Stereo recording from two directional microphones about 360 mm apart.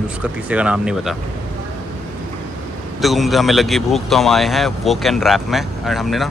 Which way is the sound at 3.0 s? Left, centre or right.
Centre.